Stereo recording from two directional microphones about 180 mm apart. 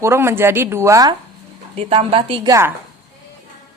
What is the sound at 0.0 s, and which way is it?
A woman's voice, 15° right (ahead or behind).